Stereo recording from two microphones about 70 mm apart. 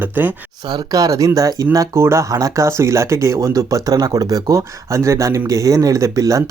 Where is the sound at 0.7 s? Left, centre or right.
Right.